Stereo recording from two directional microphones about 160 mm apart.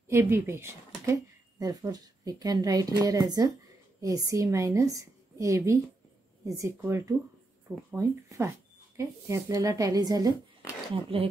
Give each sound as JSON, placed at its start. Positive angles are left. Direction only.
{"t": 0.1, "sound": "a woman's voice", "side_deg": -15}
{"t": 11.0, "sound": "speech", "side_deg": -35}